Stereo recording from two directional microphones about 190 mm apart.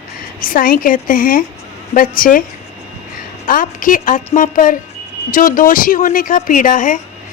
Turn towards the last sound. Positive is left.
turn(degrees=45)  # may be behind; listen again after turning